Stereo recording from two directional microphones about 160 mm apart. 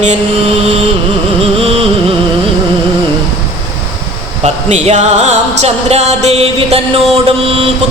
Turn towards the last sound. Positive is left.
turn(degrees=-35)  # may be behind; listen again after turning